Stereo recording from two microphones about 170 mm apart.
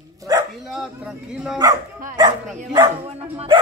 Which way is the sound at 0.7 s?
5° right (ahead or behind).